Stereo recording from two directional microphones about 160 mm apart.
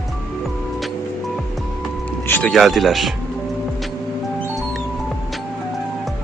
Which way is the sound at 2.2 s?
10° left (ahead or behind).